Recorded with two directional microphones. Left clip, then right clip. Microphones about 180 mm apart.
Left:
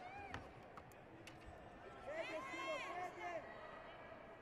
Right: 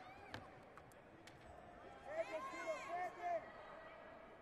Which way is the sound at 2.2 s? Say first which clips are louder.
Right 2 dB; 10° left (ahead or behind).